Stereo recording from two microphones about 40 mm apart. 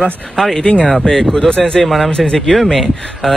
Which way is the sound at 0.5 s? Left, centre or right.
Left.